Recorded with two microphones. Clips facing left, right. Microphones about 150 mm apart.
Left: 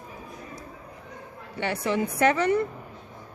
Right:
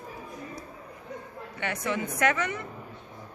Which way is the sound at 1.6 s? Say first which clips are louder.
Left 5 dB; 30° left (ahead or behind).